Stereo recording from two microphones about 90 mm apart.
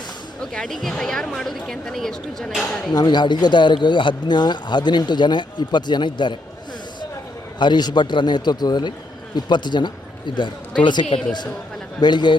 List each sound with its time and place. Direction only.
0.5 s a woman's voice: 5° left (ahead or behind)
2.9 s speech: 50° left (ahead or behind)
7.6 s speech: 55° left (ahead or behind)